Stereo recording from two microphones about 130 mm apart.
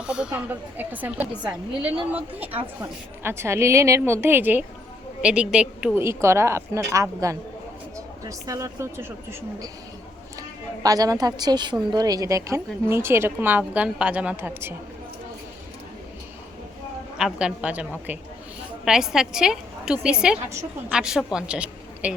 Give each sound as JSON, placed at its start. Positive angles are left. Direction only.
{"t": 0.0, "sound": "a woman's voice", "side_deg": -5}
{"t": 5.9, "sound": "a woman's voice", "side_deg": -20}
{"t": 10.8, "sound": "a woman's voice", "side_deg": -30}
{"t": 17.2, "sound": "a woman's voice", "side_deg": -5}